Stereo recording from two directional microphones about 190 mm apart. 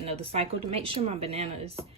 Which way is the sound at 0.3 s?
30° right (ahead or behind).